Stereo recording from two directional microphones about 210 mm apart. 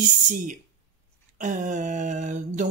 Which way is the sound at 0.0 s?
40° right (ahead or behind).